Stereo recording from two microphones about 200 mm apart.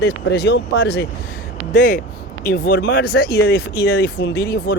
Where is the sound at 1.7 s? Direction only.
45° left (ahead or behind).